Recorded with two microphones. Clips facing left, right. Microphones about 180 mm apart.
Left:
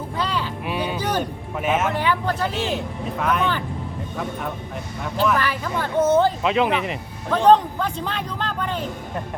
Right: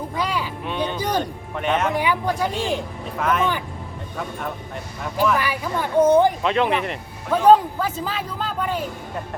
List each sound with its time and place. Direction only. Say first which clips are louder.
0.2 s a sound: even; 10° right (ahead or behind)
0.6 s music: even; 5° left (ahead or behind)
1.9 s speech: right 1 dB; 10° right (ahead or behind)
2.7 s speech: left 1 dB; centre (ahead or behind)
6.4 s speech: even; centre (ahead or behind)